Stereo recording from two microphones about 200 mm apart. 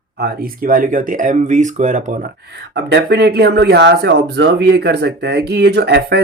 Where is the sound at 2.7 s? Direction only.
55° right (ahead or behind).